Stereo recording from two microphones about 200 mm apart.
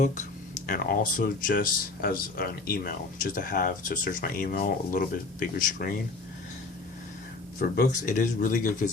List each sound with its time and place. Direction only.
0.7 s speech: 45° left (ahead or behind)
7.8 s speech: 40° left (ahead or behind)